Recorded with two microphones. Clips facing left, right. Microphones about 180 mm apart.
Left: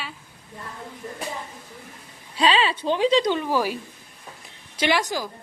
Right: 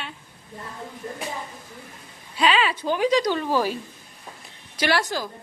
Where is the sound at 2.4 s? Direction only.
30° left (ahead or behind).